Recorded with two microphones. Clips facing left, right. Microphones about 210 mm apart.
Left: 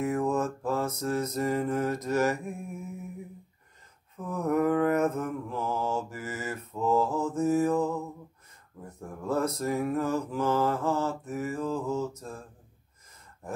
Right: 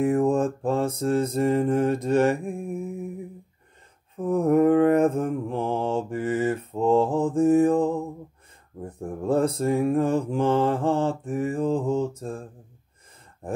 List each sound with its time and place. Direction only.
0.0 s mantra: 30° right (ahead or behind)
4.2 s mantra: 30° right (ahead or behind)